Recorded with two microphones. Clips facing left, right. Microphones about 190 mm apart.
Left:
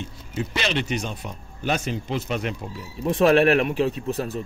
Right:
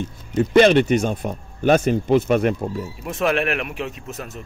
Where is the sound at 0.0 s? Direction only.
50° right (ahead or behind).